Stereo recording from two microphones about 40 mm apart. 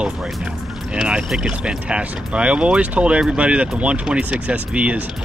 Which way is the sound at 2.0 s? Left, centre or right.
Right.